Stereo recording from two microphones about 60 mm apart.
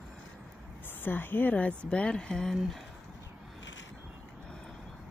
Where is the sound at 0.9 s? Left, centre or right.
Left.